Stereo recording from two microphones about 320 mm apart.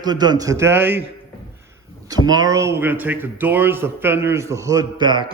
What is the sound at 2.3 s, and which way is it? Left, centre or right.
A man's voice, centre.